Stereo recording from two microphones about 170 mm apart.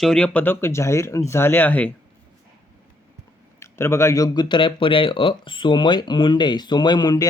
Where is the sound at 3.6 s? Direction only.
15° left (ahead or behind).